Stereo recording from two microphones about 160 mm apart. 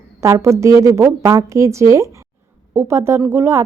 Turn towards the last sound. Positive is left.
turn(degrees=-15)  # may be behind; listen again after turning